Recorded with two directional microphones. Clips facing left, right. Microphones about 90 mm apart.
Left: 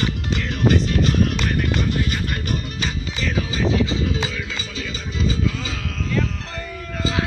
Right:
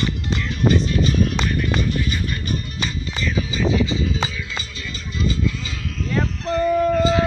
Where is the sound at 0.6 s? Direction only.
75° left (ahead or behind).